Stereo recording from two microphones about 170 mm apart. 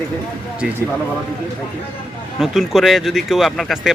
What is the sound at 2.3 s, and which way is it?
Speech, centre (ahead or behind).